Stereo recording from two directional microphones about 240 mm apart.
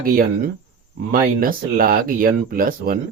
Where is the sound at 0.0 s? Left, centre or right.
Right.